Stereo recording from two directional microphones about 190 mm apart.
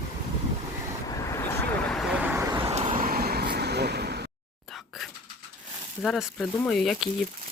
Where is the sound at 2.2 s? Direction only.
15° right (ahead or behind).